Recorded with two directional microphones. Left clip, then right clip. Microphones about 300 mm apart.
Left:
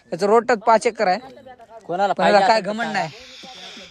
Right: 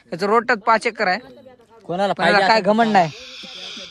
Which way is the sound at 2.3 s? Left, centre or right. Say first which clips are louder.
Right 1 dB; centre.